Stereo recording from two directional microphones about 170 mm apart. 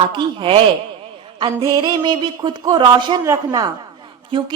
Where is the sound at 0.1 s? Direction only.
30° right (ahead or behind).